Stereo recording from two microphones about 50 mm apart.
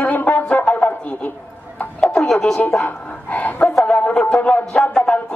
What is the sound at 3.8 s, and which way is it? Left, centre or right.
Music, left.